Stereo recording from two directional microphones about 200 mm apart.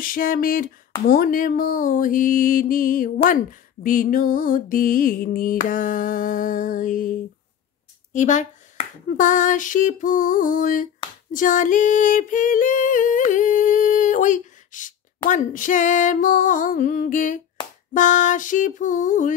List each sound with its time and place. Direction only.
0.0 s music: 45° left (ahead or behind)
8.1 s speech: 40° left (ahead or behind)
11.3 s singing: 40° left (ahead or behind)